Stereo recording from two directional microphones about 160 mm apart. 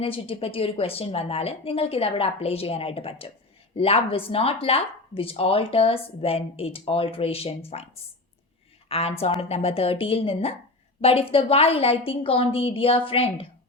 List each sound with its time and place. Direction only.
0.0 s speech: 35° left (ahead or behind)
8.9 s speech: 40° left (ahead or behind)